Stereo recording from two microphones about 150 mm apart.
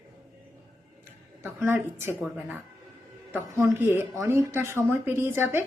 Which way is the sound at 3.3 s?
15° right (ahead or behind).